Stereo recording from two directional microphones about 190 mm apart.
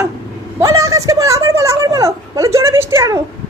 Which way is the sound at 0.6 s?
15° right (ahead or behind).